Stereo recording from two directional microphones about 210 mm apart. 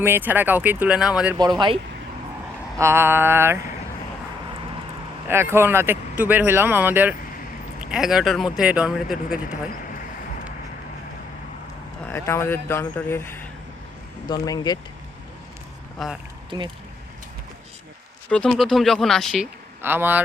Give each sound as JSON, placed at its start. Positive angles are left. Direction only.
{"t": 0.0, "sound": "speech", "side_deg": -10}
{"t": 1.4, "sound": "speech", "side_deg": -20}
{"t": 5.3, "sound": "speech", "side_deg": -10}
{"t": 12.0, "sound": "speech", "side_deg": 15}
{"t": 14.3, "sound": "speech", "side_deg": 20}
{"t": 16.0, "sound": "speech", "side_deg": 0}
{"t": 18.3, "sound": "speech", "side_deg": 5}
{"t": 19.8, "sound": "speech", "side_deg": -10}